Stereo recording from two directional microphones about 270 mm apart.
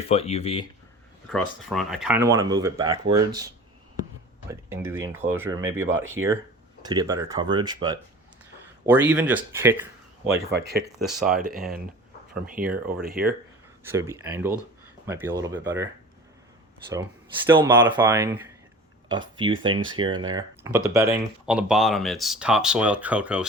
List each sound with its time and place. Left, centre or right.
0.1 s speech: left
1.3 s speech: centre
10.2 s speech: right
11.2 s speech: centre
12.6 s speech: right
13.8 s speech: centre
16.9 s speech: centre